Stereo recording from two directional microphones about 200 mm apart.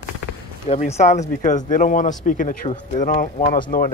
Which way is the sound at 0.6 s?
30° left (ahead or behind).